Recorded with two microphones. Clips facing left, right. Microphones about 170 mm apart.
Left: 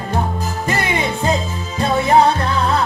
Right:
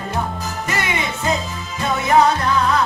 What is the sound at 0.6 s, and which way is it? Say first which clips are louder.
Music: left 4 dB; 30° left (ahead or behind).